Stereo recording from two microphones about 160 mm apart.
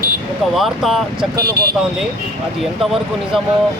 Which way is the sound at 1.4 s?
75° right (ahead or behind).